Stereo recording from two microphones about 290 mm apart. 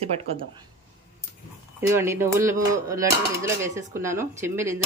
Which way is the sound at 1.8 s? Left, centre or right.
Centre.